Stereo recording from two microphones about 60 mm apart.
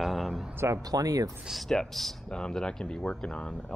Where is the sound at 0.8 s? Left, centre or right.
Right.